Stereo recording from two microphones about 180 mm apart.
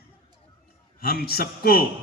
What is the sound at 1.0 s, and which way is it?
Speech, 55° left (ahead or behind).